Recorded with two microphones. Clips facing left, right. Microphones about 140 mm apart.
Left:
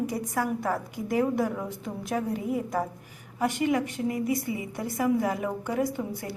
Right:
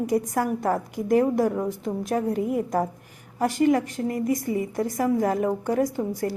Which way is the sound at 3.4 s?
40° right (ahead or behind).